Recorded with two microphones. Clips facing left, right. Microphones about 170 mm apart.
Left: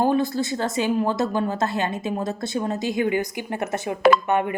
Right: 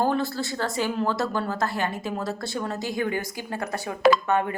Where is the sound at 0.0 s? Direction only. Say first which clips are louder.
Left 4 dB; 20° left (ahead or behind).